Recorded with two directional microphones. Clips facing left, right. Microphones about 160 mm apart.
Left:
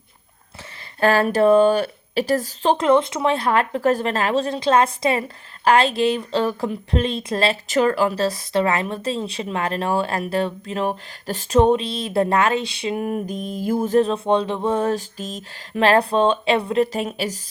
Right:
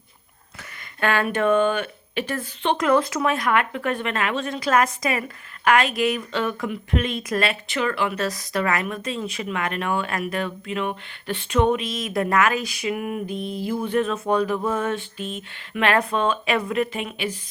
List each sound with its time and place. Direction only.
0.9 s speech: 35° left (ahead or behind)